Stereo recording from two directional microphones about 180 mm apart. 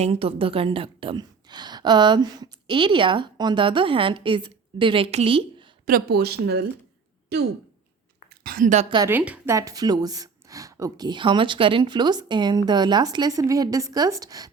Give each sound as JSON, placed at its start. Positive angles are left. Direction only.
{"t": 0.0, "sound": "a woman's voice", "side_deg": -30}
{"t": 5.8, "sound": "speech", "side_deg": -55}
{"t": 8.4, "sound": "a woman's voice", "side_deg": -50}
{"t": 9.0, "sound": "a woman's voice", "side_deg": -10}